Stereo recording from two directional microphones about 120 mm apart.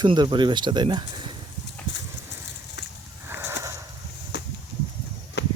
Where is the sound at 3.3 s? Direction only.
20° right (ahead or behind).